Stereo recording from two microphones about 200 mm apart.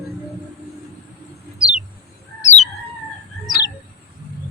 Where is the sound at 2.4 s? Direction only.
35° left (ahead or behind).